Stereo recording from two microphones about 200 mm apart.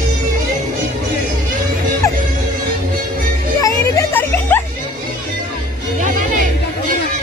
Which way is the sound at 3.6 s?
15° left (ahead or behind).